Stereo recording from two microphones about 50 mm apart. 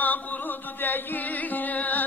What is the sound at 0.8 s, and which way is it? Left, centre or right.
Music, left.